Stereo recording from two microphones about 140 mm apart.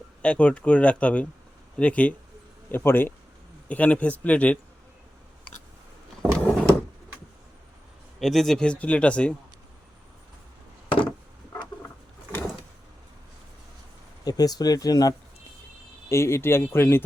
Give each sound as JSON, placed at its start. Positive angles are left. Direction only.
{"t": 0.2, "sound": "speech", "side_deg": 10}
{"t": 6.3, "sound": "a sound", "side_deg": 5}
{"t": 8.2, "sound": "speech", "side_deg": 0}
{"t": 14.3, "sound": "speech", "side_deg": 25}